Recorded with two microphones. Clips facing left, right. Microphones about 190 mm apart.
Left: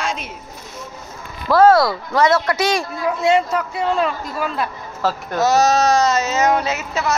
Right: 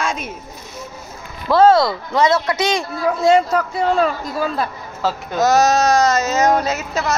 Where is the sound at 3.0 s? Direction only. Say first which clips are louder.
Right 4 dB; 35° right (ahead or behind).